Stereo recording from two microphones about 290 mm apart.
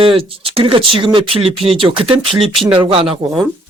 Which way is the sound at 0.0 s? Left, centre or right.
Centre.